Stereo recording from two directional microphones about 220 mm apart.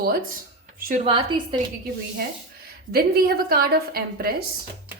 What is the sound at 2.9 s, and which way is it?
A woman's voice, 45° right (ahead or behind).